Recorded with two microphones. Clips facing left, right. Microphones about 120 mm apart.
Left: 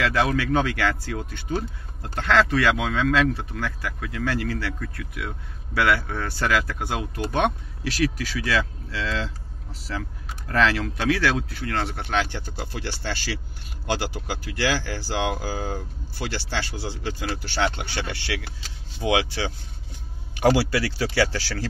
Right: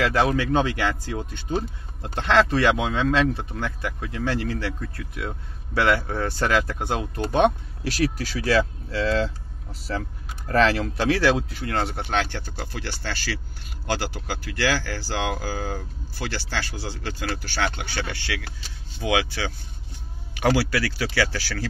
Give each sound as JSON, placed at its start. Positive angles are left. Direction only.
{"t": 0.0, "sound": "speech", "side_deg": -25}
{"t": 8.0, "sound": "speech", "side_deg": -40}
{"t": 10.5, "sound": "speech", "side_deg": -35}
{"t": 11.4, "sound": "speech", "side_deg": -20}
{"t": 12.1, "sound": "speech", "side_deg": 10}
{"t": 12.7, "sound": "speech", "side_deg": 25}